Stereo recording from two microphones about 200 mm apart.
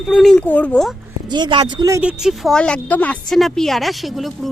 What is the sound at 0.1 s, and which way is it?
Speech, centre (ahead or behind).